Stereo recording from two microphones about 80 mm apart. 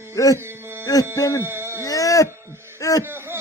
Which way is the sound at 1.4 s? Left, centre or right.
Right.